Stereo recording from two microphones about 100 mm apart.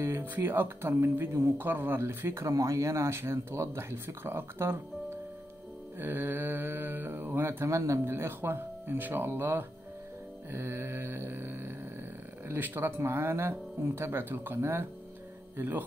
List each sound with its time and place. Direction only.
0.0 s speech: 25° right (ahead or behind)
5.9 s speech: 20° right (ahead or behind)